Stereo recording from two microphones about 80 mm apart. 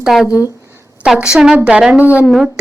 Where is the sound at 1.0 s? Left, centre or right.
Centre.